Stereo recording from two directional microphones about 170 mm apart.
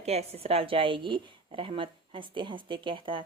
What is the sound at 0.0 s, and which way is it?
A woman's voice, 40° right (ahead or behind).